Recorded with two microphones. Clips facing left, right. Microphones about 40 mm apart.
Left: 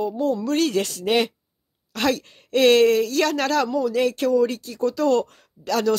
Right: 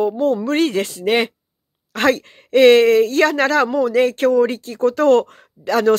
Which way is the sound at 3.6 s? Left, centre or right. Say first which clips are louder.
Right 5 dB; right.